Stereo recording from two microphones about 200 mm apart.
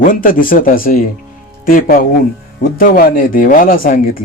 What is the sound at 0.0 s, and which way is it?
Speech, 45° left (ahead or behind).